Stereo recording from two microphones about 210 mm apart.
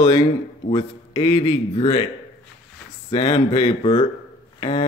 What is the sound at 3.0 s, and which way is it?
Speech, 25° left (ahead or behind).